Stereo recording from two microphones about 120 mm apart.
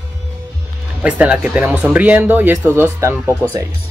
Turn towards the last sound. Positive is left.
turn(degrees=-20)  # may be behind; listen again after turning